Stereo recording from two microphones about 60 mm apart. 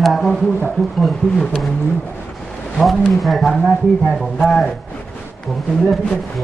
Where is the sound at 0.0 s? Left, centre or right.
Centre.